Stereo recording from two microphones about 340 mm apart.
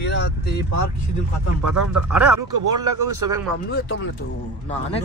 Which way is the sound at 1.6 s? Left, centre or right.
Right.